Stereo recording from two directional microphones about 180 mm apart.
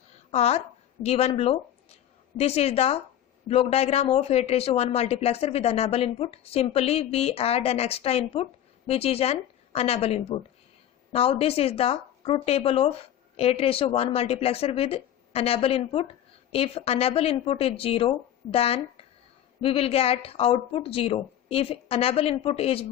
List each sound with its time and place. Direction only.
0.3 s speech: 35° left (ahead or behind)